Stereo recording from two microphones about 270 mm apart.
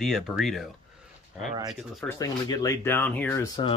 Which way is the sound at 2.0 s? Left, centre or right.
Centre.